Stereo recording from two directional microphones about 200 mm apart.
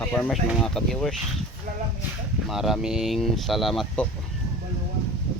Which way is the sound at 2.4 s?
Centre (ahead or behind).